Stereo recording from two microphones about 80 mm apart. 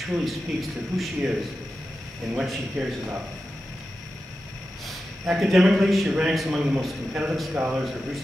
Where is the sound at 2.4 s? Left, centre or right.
Centre.